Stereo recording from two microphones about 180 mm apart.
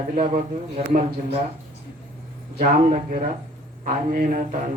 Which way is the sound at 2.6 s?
50° right (ahead or behind).